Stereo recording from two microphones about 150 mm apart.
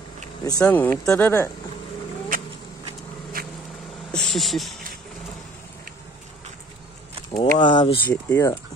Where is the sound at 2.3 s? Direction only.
65° right (ahead or behind).